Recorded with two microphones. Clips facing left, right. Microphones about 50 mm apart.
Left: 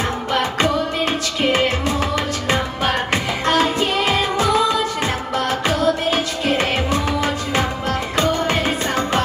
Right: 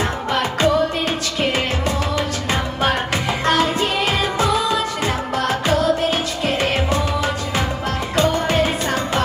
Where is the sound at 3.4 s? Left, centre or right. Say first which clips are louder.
Left 1 dB; left.